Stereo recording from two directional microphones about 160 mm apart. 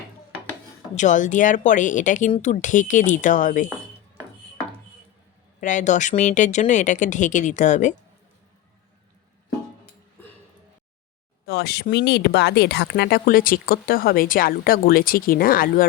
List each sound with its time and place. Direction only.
0.9 s speech: 50° left (ahead or behind)
5.5 s speech: 50° left (ahead or behind)
11.4 s speech: 90° left; by 15.9 s 65° left (ahead or behind)